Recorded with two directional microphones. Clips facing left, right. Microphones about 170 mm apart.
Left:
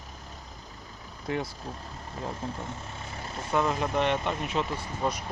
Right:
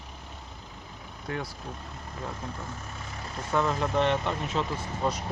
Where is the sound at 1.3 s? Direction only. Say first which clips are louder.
Left 3 dB; 25° left (ahead or behind).